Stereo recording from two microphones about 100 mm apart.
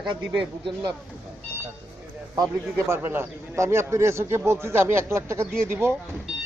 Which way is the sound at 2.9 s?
25° right (ahead or behind).